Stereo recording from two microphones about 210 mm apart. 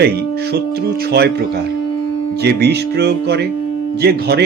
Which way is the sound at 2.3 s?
50° right (ahead or behind).